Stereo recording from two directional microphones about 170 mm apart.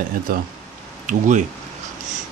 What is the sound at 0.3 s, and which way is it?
Speech, 60° right (ahead or behind).